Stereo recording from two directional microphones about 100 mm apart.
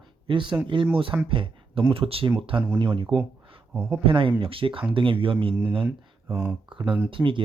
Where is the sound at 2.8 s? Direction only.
55° right (ahead or behind).